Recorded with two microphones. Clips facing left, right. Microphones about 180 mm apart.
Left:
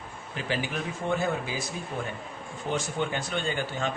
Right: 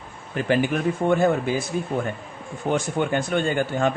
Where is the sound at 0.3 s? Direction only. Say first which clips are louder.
Right 9 dB; 55° right (ahead or behind).